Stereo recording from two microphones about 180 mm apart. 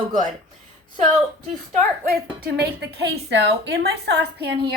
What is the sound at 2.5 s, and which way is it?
A woman's voice, 65° right (ahead or behind).